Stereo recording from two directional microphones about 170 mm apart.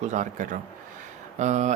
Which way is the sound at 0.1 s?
45° right (ahead or behind).